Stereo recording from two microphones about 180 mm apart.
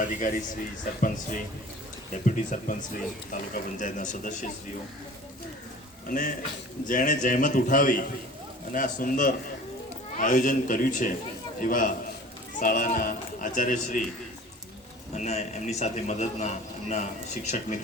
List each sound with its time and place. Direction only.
0.0 s speech: 50° left (ahead or behind)
6.1 s speech: 50° left (ahead or behind)
15.1 s a man's voice: 40° left (ahead or behind)